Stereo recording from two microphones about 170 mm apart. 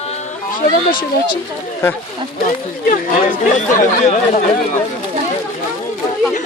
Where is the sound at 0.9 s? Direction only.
30° left (ahead or behind).